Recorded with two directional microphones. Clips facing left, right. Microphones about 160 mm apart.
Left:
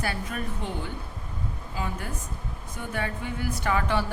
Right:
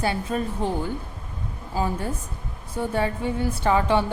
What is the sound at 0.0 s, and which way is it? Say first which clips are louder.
Speech: right 6 dB; 25° right (ahead or behind).